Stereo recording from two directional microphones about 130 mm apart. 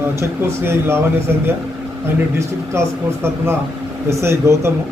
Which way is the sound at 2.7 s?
20° right (ahead or behind).